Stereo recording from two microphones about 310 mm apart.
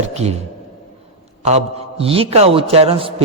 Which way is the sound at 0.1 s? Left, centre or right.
Right.